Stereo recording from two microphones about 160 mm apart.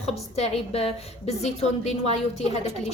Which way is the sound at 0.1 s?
40° left (ahead or behind).